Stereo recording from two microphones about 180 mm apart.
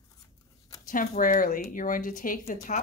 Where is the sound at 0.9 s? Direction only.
50° left (ahead or behind).